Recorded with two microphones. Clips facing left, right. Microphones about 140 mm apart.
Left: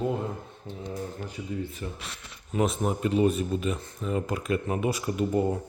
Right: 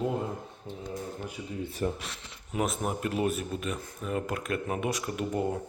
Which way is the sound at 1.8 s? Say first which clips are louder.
Right 7 dB; 45° right (ahead or behind).